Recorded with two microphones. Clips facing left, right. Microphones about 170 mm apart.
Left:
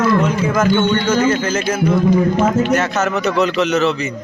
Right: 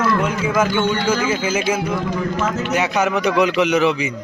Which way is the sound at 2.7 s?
10° right (ahead or behind).